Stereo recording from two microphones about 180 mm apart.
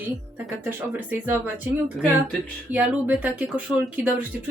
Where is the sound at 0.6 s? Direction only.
10° right (ahead or behind).